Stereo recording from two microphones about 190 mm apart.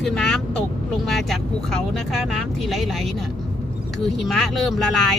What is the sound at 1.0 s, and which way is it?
Speech, centre (ahead or behind).